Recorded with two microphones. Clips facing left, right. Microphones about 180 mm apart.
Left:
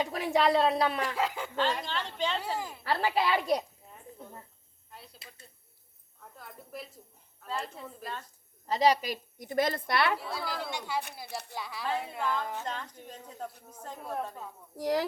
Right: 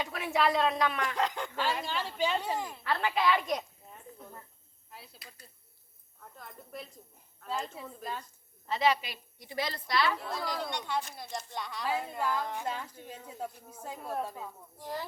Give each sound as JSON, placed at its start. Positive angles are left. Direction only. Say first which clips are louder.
{"t": 0.0, "sound": "a woman's voice", "louder": "left 3 dB", "side_deg": 35}
{"t": 1.0, "sound": "speech", "louder": "even", "side_deg": 5}
{"t": 1.5, "sound": "speech", "louder": "left 3 dB", "side_deg": -10}
{"t": 2.4, "sound": "speech", "louder": "even", "side_deg": 0}
{"t": 2.8, "sound": "a woman's voice", "louder": "left 1 dB", "side_deg": 35}
{"t": 4.9, "sound": "a sound", "louder": "even", "side_deg": 0}
{"t": 6.3, "sound": "speech", "louder": "left 1 dB", "side_deg": 5}
{"t": 8.6, "sound": "a woman's voice", "louder": "left 3 dB", "side_deg": 40}
{"t": 10.2, "sound": "speech", "louder": "right 1 dB", "side_deg": 5}
{"t": 11.3, "sound": "speech", "louder": "even", "side_deg": 65}
{"t": 11.5, "sound": "speech", "louder": "even", "side_deg": 5}
{"t": 14.8, "sound": "speech", "louder": "left 10 dB", "side_deg": 85}